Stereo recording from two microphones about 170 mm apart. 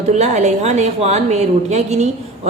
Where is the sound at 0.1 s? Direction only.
45° right (ahead or behind).